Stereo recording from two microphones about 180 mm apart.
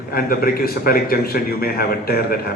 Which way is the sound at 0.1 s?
55° left (ahead or behind).